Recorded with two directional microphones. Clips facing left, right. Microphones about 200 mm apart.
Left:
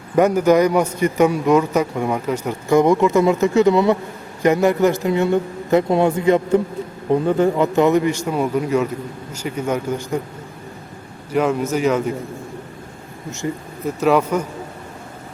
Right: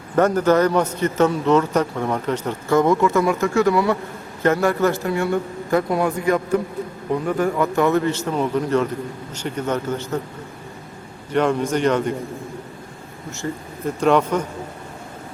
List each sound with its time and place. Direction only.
0.2 s a man's voice: 10° left (ahead or behind)
11.3 s a man's voice: 5° left (ahead or behind)
13.4 s a man's voice: 15° left (ahead or behind)
13.8 s a man's voice: 5° left (ahead or behind)